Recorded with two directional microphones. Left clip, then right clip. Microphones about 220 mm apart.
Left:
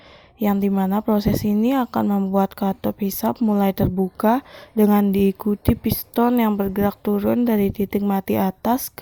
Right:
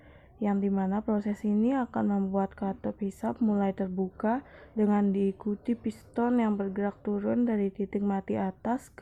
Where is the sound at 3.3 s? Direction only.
25° left (ahead or behind).